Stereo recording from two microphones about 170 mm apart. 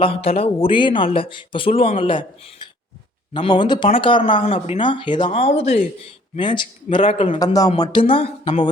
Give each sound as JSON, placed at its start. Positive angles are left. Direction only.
{"t": 0.0, "sound": "a man's voice", "side_deg": 35}
{"t": 6.3, "sound": "a man's voice", "side_deg": 25}
{"t": 8.1, "sound": "speech", "side_deg": 30}